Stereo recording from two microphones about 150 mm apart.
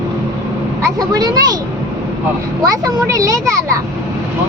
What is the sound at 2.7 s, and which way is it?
A child's voice, 25° right (ahead or behind).